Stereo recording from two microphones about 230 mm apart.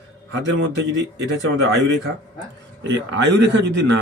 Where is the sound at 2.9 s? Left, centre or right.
Right.